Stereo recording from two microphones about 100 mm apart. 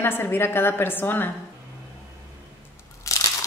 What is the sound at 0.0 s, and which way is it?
A woman's voice, 20° left (ahead or behind).